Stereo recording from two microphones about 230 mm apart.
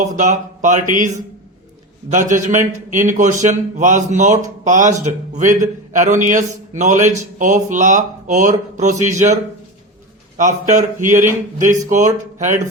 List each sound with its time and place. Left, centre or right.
0.0 s a man's voice: right
10.3 s a man's voice: right